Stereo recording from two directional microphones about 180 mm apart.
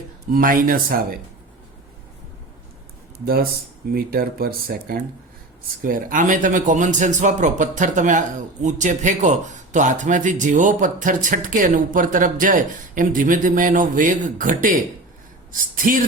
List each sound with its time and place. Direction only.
0.3 s speech: 50° right (ahead or behind)
3.9 s speech: 55° right (ahead or behind)